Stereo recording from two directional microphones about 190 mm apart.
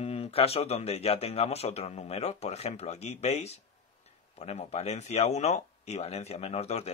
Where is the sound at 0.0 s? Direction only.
30° left (ahead or behind).